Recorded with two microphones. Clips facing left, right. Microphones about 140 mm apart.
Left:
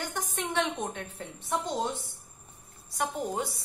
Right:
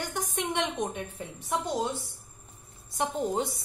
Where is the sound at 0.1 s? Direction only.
15° right (ahead or behind).